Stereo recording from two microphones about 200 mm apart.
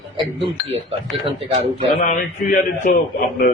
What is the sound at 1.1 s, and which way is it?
Speech, 30° right (ahead or behind).